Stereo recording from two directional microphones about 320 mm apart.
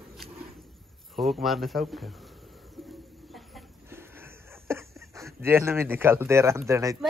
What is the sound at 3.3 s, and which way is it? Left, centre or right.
Chicken, centre.